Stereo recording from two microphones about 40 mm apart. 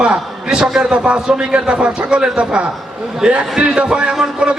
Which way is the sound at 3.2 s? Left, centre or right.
Centre.